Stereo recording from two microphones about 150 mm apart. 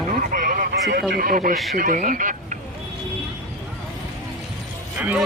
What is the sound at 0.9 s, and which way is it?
Speech, 90° right.